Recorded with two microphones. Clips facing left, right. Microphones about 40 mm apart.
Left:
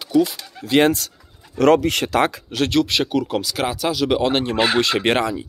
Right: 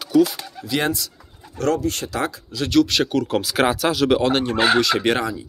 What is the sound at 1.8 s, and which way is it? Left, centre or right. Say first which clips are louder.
Speech: left 5 dB; left.